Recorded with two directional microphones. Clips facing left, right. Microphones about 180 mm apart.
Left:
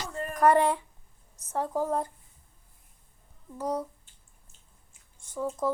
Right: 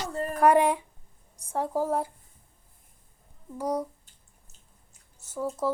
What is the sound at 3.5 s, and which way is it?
Speech, 10° right (ahead or behind).